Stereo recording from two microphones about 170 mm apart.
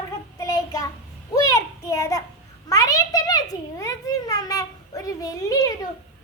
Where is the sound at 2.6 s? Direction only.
20° left (ahead or behind).